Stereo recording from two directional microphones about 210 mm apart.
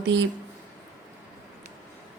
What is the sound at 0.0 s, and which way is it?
Speech, 60° right (ahead or behind).